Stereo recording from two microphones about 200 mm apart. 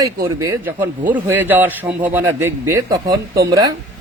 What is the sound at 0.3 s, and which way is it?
Speech, 15° right (ahead or behind).